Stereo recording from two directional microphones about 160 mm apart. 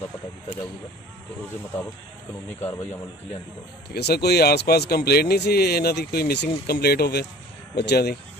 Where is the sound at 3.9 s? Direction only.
90° left.